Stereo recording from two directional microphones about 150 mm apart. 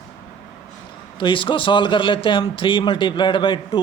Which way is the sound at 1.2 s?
35° left (ahead or behind).